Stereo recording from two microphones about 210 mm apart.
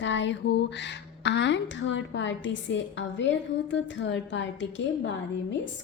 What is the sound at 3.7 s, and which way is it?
A woman's voice, 60° left (ahead or behind).